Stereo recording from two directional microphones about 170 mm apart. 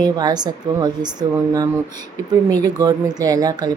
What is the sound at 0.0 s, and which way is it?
Speech, 25° right (ahead or behind).